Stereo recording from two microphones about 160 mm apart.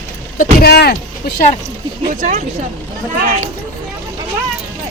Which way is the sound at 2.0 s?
50° right (ahead or behind).